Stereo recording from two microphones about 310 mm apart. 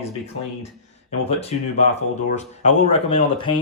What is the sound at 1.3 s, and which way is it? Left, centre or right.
Speech, centre.